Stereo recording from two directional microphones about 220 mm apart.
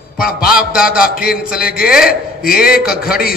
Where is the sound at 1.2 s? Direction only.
40° left (ahead or behind).